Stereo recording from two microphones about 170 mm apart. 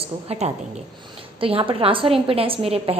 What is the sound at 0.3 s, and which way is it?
A woman's voice, 40° right (ahead or behind).